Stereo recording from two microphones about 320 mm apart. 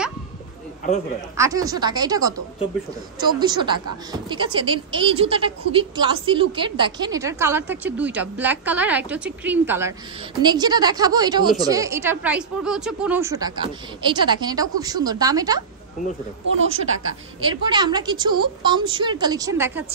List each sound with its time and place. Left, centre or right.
1.3 s a woman's voice: centre
3.3 s a woman's voice: centre
16.5 s a woman's voice: right
17.4 s a woman's voice: centre